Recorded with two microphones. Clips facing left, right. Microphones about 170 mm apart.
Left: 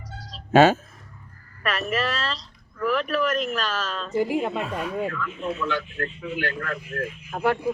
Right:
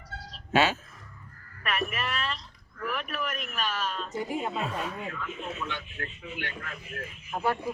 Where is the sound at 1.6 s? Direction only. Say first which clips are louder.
Left 6 dB; 90° left; by 4.6 s 70° left (ahead or behind).